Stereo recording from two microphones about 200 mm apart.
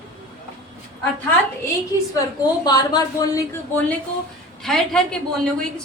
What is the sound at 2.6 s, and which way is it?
A woman's voice, 20° left (ahead or behind).